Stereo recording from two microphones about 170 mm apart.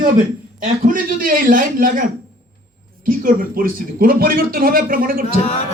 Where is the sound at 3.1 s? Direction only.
55° right (ahead or behind).